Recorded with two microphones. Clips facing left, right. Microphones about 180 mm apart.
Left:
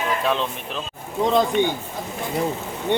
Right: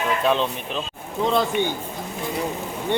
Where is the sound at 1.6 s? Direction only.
15° left (ahead or behind).